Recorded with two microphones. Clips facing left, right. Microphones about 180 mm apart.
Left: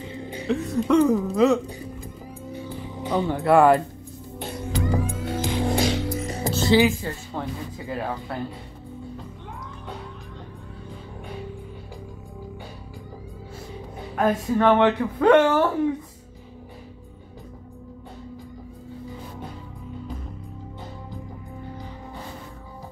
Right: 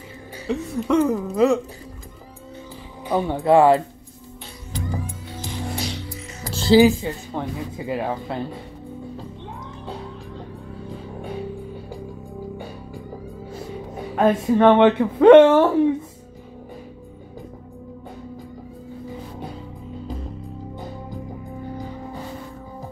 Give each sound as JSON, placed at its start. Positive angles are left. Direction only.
{"t": 0.1, "sound": "music", "side_deg": 25}
{"t": 0.7, "sound": "speech", "side_deg": -10}
{"t": 2.5, "sound": "music", "side_deg": 15}
{"t": 3.0, "sound": "speech", "side_deg": -15}
{"t": 4.4, "sound": "music", "side_deg": 65}
{"t": 6.0, "sound": "music", "side_deg": 40}
{"t": 6.5, "sound": "speech", "side_deg": -30}
{"t": 7.3, "sound": "speech", "side_deg": -15}
{"t": 14.1, "sound": "speech", "side_deg": -25}